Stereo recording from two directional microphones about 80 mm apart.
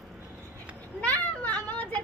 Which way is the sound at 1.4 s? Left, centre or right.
Centre.